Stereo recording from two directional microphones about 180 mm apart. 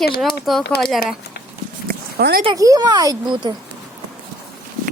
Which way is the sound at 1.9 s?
60° right (ahead or behind).